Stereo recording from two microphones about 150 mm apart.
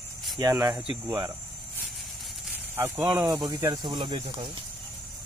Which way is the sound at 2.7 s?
15° right (ahead or behind).